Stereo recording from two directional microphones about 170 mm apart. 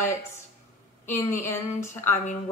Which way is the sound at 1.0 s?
45° left (ahead or behind).